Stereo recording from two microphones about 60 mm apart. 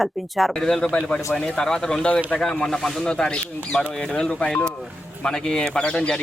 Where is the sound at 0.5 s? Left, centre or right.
Centre.